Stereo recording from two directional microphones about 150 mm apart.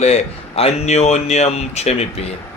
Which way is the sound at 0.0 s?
45° left (ahead or behind).